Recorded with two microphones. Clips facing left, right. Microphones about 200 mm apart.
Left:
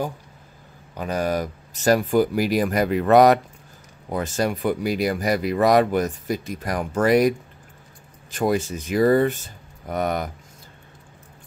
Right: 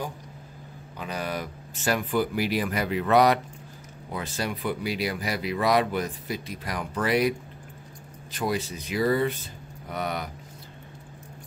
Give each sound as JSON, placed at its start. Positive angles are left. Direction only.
{"t": 0.9, "sound": "speech", "side_deg": 45}